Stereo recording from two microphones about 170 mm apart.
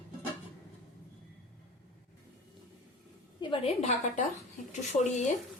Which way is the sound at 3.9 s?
45° left (ahead or behind).